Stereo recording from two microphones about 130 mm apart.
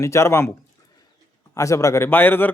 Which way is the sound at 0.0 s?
20° left (ahead or behind).